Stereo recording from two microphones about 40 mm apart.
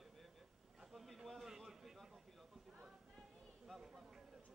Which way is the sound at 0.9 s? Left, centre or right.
Centre.